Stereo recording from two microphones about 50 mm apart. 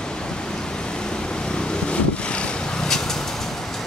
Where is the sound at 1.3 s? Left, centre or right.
Centre.